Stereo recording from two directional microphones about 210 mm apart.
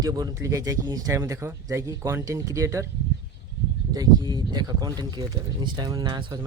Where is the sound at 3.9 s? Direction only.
20° right (ahead or behind).